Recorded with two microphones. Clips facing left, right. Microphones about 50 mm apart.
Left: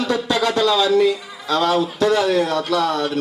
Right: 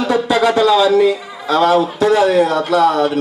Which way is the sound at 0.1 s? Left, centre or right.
Right.